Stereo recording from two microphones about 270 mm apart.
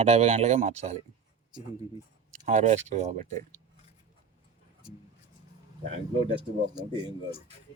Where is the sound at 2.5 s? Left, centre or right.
Right.